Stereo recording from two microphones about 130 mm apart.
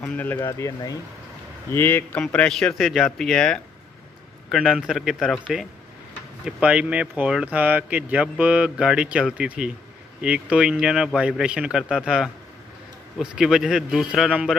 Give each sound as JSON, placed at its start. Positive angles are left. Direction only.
{"t": 0.0, "sound": "speech", "side_deg": 10}
{"t": 0.4, "sound": "speech", "side_deg": 25}
{"t": 2.2, "sound": "speech", "side_deg": 5}